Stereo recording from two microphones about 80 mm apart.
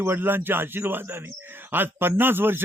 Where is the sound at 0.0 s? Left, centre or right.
Right.